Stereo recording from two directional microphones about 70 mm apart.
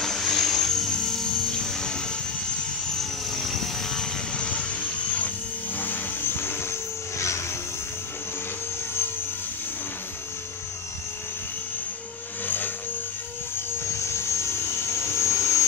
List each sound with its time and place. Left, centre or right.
0.0 s music: centre
3.0 s helicopter: centre
5.8 s vehicle: left
12.4 s music: left
13.9 s vehicle: left